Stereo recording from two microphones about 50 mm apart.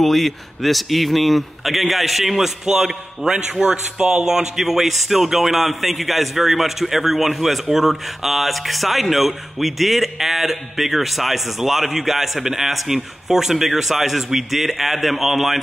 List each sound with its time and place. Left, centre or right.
0.0 s a man's voice: centre